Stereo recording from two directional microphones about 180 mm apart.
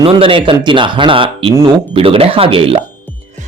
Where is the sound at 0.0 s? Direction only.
30° right (ahead or behind).